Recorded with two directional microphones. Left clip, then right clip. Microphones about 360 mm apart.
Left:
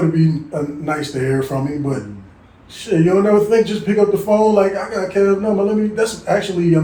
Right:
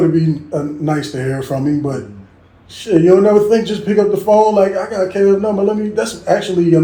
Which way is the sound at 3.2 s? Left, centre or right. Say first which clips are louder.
Right 2 dB; right.